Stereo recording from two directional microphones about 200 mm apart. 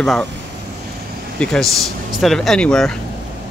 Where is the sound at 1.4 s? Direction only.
5° left (ahead or behind).